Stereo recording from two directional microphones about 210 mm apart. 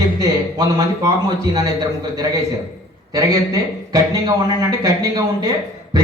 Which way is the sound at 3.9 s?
15° right (ahead or behind).